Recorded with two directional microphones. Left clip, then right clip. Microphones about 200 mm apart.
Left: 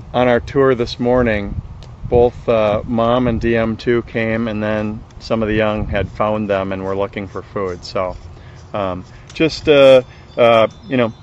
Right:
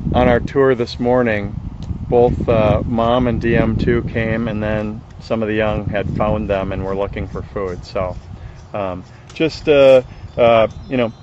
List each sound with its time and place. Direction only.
0.1 s speech: 10° left (ahead or behind)